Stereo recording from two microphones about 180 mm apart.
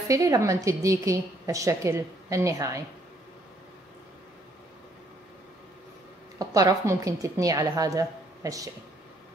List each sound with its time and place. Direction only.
0.1 s a woman's voice: 20° right (ahead or behind)
6.3 s a woman's voice: 20° right (ahead or behind)